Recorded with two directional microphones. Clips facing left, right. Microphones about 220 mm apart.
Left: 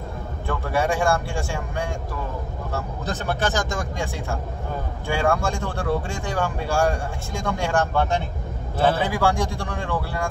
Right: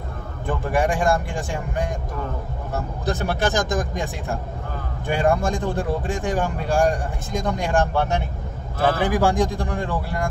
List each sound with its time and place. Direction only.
0.5 s speech: 15° right (ahead or behind)
2.7 s speech: 15° right (ahead or behind)
8.7 s a man's voice: 30° left (ahead or behind)
9.1 s speech: 15° right (ahead or behind)